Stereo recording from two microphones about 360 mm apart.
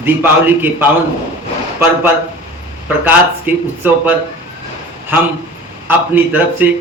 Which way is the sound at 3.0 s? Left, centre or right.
Centre.